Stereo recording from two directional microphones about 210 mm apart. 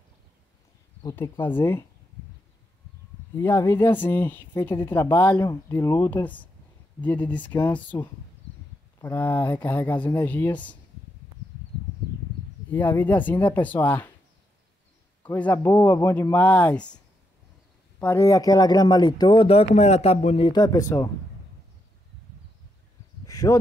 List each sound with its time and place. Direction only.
1.0 s speech: 15° left (ahead or behind)
3.3 s speech: 10° left (ahead or behind)
12.6 s speech: 10° left (ahead or behind)
15.2 s speech: 10° left (ahead or behind)
23.2 s a sound: 15° left (ahead or behind)